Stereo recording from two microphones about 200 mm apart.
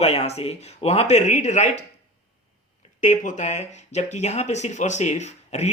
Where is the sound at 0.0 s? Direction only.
30° left (ahead or behind).